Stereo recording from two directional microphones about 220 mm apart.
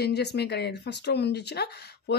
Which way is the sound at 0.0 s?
50° left (ahead or behind).